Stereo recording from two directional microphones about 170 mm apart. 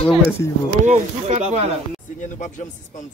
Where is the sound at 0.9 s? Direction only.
40° right (ahead or behind).